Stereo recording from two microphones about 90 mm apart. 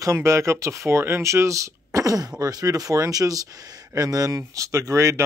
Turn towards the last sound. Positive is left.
turn(degrees=-35)  # may be behind; listen again after turning